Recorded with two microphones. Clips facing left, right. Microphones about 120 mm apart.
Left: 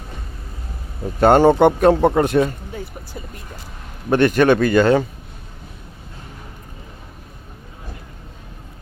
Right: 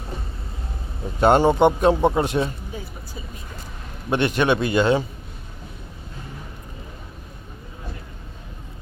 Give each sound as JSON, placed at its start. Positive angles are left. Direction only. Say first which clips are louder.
{"t": 1.2, "sound": "a man's voice", "louder": "left 4 dB", "side_deg": 50}
{"t": 4.1, "sound": "a man's voice", "louder": "left 6 dB", "side_deg": 45}